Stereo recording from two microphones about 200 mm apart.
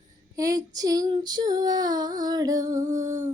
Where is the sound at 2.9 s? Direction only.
40° right (ahead or behind).